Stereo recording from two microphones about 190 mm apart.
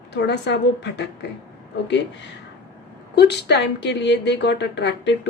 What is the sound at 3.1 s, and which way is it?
A woman's voice, 60° left (ahead or behind).